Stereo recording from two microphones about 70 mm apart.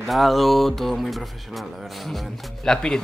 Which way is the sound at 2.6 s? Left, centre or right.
Centre.